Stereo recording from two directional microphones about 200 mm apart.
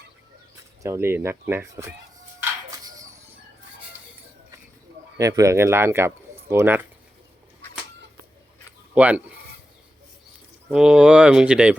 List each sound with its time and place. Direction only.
0.8 s speech: 15° right (ahead or behind)
2.4 s a sound: 15° right (ahead or behind)
5.1 s speech: 15° right (ahead or behind)
9.0 s speech: 5° right (ahead or behind)
10.7 s speech: 5° right (ahead or behind)